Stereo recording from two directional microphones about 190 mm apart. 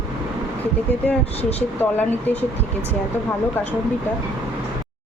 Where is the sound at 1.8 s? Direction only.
10° left (ahead or behind).